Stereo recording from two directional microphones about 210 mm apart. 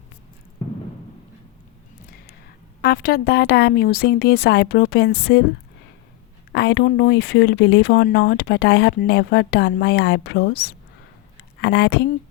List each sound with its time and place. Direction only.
0.6 s a sound: 30° left (ahead or behind)
2.8 s speech: 45° left (ahead or behind)
6.5 s speech: 55° left (ahead or behind)